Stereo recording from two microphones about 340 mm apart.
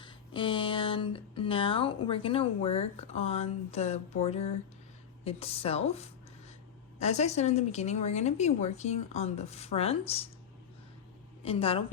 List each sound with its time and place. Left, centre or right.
0.0 s a woman's voice: centre
11.4 s speech: centre